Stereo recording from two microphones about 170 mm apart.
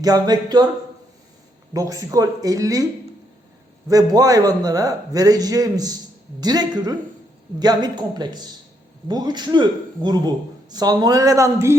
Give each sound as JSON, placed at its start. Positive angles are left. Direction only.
{"t": 0.0, "sound": "a man's voice", "side_deg": -25}
{"t": 1.7, "sound": "a man's voice", "side_deg": -20}
{"t": 3.8, "sound": "a man's voice", "side_deg": -20}